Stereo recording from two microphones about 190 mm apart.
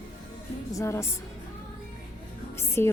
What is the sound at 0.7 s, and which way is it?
Speech, 15° left (ahead or behind).